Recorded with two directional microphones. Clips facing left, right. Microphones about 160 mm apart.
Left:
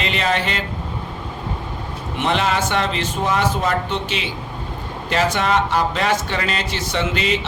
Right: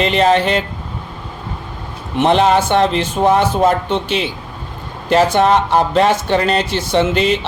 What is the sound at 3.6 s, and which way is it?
Speech, 50° right (ahead or behind).